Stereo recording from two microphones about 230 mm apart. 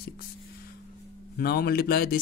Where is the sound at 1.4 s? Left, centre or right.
Left.